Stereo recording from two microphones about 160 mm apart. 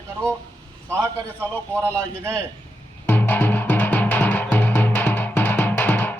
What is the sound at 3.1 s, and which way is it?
Music, 10° left (ahead or behind).